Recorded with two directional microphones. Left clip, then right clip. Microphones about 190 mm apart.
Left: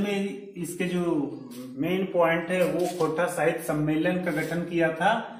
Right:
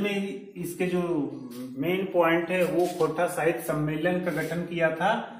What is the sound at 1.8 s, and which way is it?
A man's voice, 20° right (ahead or behind).